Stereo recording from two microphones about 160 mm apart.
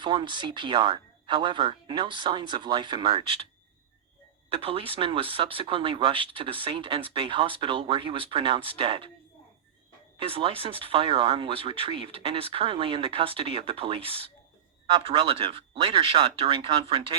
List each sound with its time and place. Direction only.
0.0 s speech: 30° right (ahead or behind)
4.4 s speech: 35° right (ahead or behind)
10.2 s speech: 35° right (ahead or behind)